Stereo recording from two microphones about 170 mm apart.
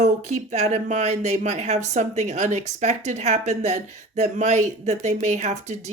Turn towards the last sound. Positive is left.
turn(degrees=-40)  # may be behind; listen again after turning